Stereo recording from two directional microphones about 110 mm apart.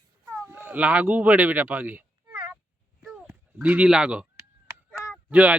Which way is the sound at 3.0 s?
5° right (ahead or behind).